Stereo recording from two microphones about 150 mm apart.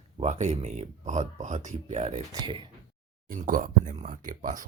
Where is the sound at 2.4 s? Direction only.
35° right (ahead or behind).